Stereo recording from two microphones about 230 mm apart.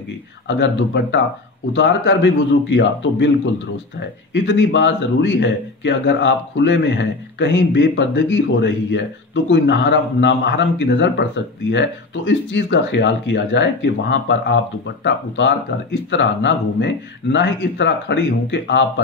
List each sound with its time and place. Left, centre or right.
0.5 s speech: left
4.3 s speech: left
12.3 s speech: left